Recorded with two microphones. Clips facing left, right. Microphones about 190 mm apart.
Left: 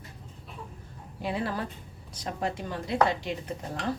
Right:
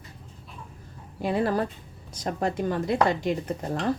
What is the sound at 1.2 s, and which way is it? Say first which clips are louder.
A woman's voice: right 6 dB; 45° right (ahead or behind).